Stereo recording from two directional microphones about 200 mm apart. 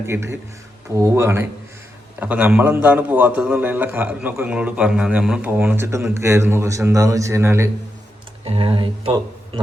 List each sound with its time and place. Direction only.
0.0 s a man's voice: 15° right (ahead or behind)
8.4 s speech: 25° right (ahead or behind)